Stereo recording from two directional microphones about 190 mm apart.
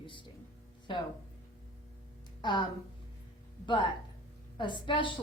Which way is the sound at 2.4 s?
25° left (ahead or behind).